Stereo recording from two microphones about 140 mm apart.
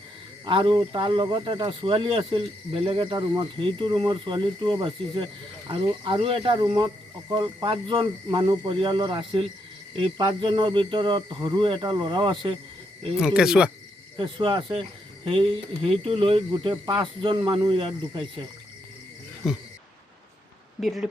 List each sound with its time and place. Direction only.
0.4 s speech: 35° right (ahead or behind)
13.1 s speech: 5° right (ahead or behind)
14.2 s speech: 35° right (ahead or behind)